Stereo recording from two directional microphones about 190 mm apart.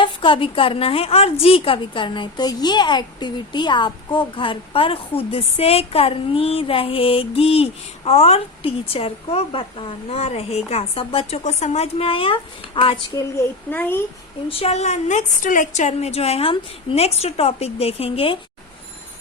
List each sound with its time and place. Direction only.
0.0 s a woman's voice: 25° left (ahead or behind)
13.7 s a child's voice: 10° left (ahead or behind)
14.5 s a woman's voice: 35° left (ahead or behind)